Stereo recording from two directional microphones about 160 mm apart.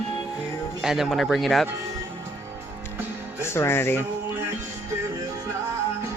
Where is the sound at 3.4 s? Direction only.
15° left (ahead or behind).